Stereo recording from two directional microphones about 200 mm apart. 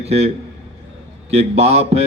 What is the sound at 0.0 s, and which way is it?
Speech, 30° right (ahead or behind).